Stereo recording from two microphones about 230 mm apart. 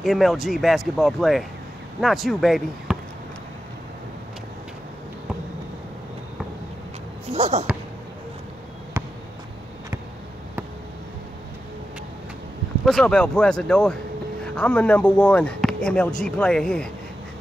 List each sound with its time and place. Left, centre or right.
0.0 s speech: centre
7.3 s speech: right
9.0 s a sound: centre
12.8 s speech: centre